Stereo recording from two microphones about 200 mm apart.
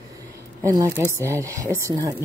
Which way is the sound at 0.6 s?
15° right (ahead or behind).